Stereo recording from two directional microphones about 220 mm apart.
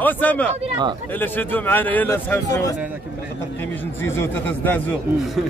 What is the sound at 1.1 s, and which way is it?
A man's voice, 10° left (ahead or behind).